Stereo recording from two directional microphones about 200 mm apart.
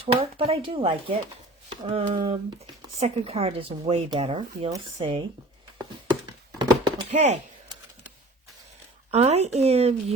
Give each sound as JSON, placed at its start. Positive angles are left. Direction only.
{"t": 0.1, "sound": "speech", "side_deg": -30}
{"t": 6.6, "sound": "a sound", "side_deg": -25}
{"t": 7.1, "sound": "speech", "side_deg": -35}
{"t": 9.1, "sound": "speech", "side_deg": -30}